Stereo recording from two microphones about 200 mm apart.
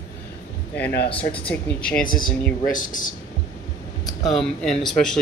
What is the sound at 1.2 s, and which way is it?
Speech, 5° left (ahead or behind).